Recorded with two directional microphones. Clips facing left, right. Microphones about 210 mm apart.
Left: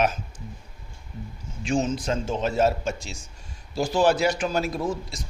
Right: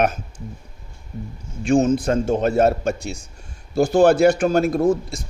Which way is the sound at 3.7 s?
50° right (ahead or behind).